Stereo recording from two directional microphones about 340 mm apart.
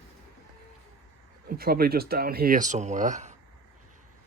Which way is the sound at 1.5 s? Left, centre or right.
Right.